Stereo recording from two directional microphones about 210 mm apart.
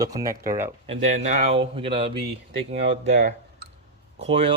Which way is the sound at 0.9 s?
30° right (ahead or behind).